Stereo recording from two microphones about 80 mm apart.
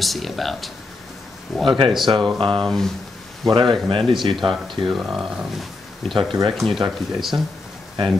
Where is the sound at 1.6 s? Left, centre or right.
Right.